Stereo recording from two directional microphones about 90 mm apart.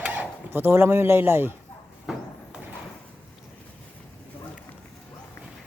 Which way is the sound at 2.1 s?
5° right (ahead or behind).